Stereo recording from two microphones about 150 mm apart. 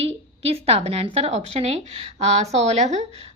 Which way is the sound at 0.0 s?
40° right (ahead or behind).